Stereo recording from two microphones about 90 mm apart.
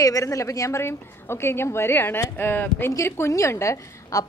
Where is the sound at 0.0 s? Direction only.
40° left (ahead or behind).